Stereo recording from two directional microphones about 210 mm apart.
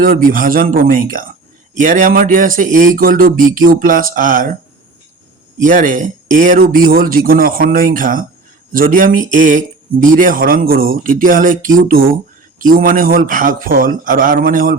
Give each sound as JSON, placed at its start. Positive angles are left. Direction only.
{"t": 0.0, "sound": "speech", "side_deg": -40}
{"t": 5.6, "sound": "speech", "side_deg": -40}